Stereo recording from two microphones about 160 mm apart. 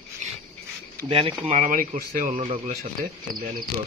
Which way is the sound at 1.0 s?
35° right (ahead or behind).